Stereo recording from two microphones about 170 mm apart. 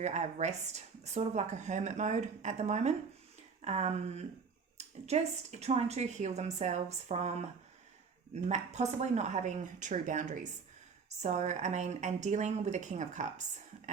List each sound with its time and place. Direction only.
0.0 s a woman's voice: 40° right (ahead or behind)
8.4 s speech: 40° right (ahead or behind)